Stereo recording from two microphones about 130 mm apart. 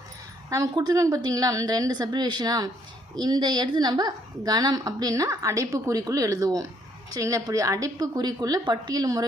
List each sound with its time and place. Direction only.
0.5 s a woman's voice: 30° right (ahead or behind)